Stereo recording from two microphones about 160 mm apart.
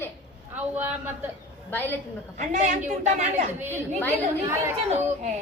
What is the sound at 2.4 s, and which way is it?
Speech, 50° right (ahead or behind).